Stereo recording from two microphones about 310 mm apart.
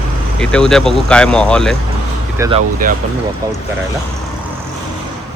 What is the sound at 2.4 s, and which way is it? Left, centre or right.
Speech, centre.